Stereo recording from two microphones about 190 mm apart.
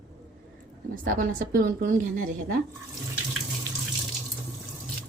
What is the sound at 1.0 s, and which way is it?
A woman's voice, 45° right (ahead or behind).